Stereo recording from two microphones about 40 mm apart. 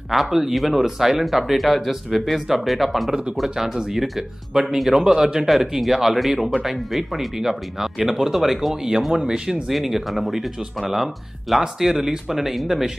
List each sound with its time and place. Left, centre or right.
0.1 s speech: centre
3.4 s speech: centre
5.5 s speech: centre
9.7 s speech: centre